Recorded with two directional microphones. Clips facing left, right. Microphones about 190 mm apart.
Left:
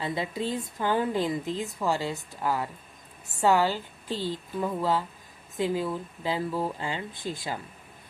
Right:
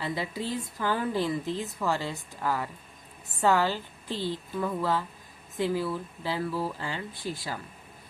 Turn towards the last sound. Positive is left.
turn(degrees=20)  # may be behind; listen again after turning